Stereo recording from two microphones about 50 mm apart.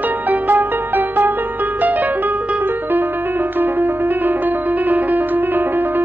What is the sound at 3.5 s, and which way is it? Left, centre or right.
Music, right.